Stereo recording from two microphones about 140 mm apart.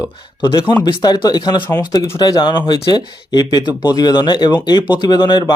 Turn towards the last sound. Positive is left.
turn(degrees=35)  # may be behind; listen again after turning